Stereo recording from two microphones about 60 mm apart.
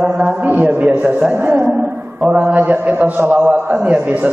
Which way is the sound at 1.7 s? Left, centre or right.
Right.